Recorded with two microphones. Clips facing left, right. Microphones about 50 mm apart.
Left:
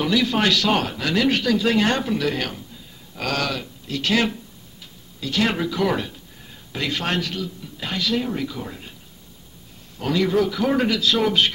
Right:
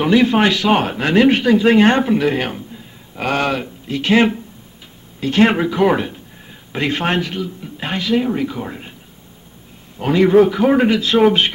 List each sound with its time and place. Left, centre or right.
0.0 s speech: right
9.9 s speech: right